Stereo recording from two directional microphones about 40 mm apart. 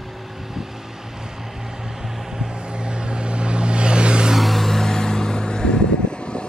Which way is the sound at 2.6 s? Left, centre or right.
Right.